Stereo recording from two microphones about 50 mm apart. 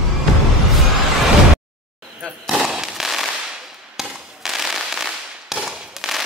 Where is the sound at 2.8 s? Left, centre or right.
Centre.